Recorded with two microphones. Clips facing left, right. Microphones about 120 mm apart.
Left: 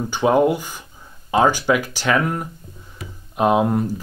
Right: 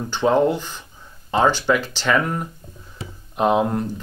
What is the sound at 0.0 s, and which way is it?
Speech, 10° left (ahead or behind).